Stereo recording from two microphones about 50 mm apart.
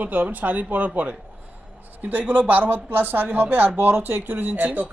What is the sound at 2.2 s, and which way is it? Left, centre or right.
Speech, right.